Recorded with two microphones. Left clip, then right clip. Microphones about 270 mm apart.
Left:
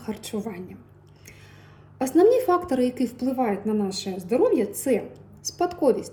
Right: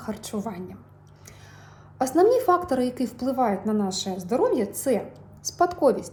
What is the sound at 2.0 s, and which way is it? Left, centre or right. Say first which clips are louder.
Speech: left 1 dB; right.